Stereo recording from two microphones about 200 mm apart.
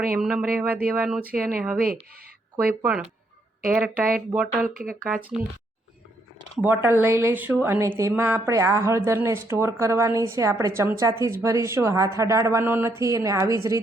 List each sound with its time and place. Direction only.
0.2 s speech: 5° right (ahead or behind)
1.4 s speech: 45° right (ahead or behind)
3.7 s speech: 5° right (ahead or behind)
4.7 s speech: 45° right (ahead or behind)
5.0 s speech: 5° right (ahead or behind)
6.6 s speech: 10° right (ahead or behind)